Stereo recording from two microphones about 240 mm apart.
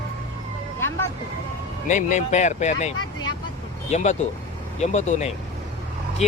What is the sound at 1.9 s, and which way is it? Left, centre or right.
Speech, left.